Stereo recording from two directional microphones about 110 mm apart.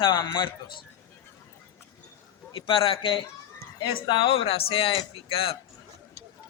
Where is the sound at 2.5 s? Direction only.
55° left (ahead or behind).